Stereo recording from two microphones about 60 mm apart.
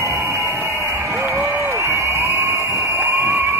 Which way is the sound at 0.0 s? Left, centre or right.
Right.